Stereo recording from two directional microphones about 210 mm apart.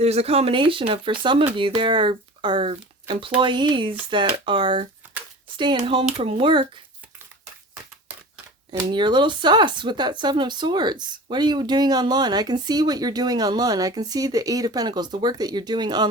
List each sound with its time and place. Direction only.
0.0 s speech: 30° right (ahead or behind)
8.7 s speech: 20° right (ahead or behind)